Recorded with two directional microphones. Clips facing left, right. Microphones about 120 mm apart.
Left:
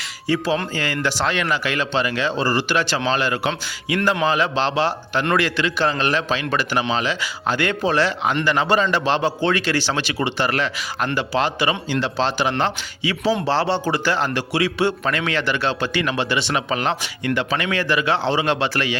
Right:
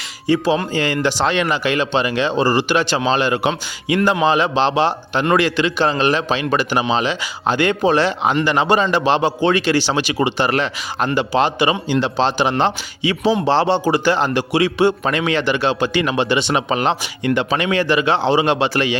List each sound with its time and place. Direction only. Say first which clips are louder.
0.3 s a man's voice: right 4 dB; 20° right (ahead or behind)